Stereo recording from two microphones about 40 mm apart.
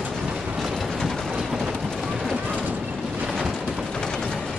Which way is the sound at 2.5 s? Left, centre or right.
Right.